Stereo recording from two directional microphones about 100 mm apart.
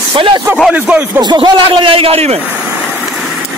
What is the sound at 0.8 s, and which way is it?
Speech, 10° right (ahead or behind).